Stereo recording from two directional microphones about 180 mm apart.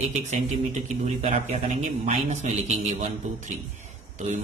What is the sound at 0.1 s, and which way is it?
Speech, 40° right (ahead or behind).